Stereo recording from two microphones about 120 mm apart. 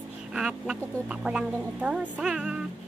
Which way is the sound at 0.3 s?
5° right (ahead or behind).